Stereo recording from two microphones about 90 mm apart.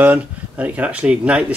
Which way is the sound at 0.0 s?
15° right (ahead or behind).